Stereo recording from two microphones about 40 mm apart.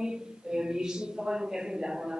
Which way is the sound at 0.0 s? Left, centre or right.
Centre.